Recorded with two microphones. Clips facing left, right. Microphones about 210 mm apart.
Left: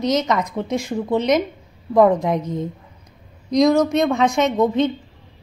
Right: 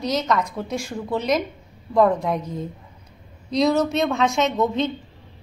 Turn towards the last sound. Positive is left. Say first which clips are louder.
# left 3 dB
turn(degrees=15)  # may be behind; listen again after turning